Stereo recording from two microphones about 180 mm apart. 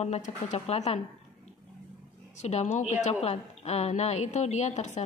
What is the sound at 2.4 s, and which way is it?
A woman's voice, 40° left (ahead or behind).